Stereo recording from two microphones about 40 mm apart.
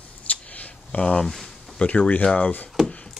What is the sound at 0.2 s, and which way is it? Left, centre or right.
Scissors, left.